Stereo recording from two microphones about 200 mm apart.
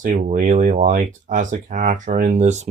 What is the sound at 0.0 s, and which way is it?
Speech, 40° right (ahead or behind).